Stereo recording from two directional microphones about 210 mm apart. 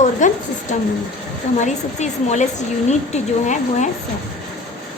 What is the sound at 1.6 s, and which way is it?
A woman's voice, 35° left (ahead or behind).